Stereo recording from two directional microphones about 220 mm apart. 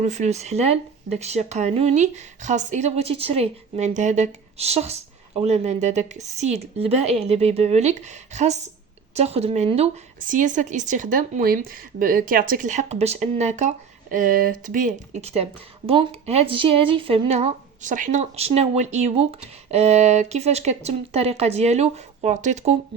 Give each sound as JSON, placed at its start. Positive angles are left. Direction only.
{"t": 0.0, "sound": "speech", "side_deg": -30}